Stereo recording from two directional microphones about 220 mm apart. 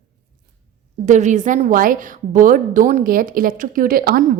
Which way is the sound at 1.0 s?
35° right (ahead or behind).